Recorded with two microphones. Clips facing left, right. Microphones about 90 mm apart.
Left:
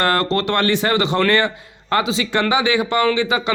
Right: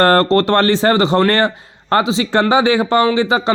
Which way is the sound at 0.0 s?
40° right (ahead or behind).